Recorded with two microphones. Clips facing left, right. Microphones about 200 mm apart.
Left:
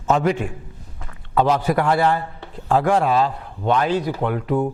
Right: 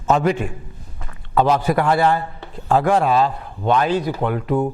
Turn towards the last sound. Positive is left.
turn(degrees=-20)  # may be behind; listen again after turning